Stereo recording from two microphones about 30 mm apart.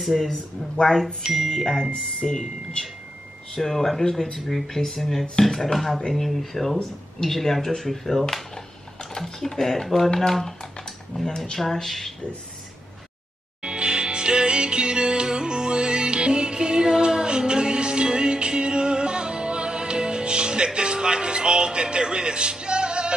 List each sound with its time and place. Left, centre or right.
0.1 s speech: left
1.5 s speech: centre
3.5 s speech: centre
9.8 s speech: centre
11.1 s speech: left
11.5 s speech: centre
13.6 s music: right